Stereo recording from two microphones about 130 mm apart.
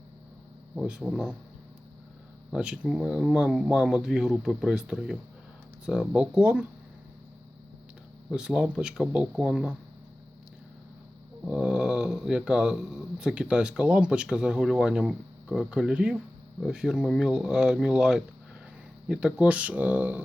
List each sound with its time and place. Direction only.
0.8 s speech: 5° right (ahead or behind)
2.5 s speech: 5° right (ahead or behind)
8.3 s speech: 5° right (ahead or behind)
11.4 s speech: 5° right (ahead or behind)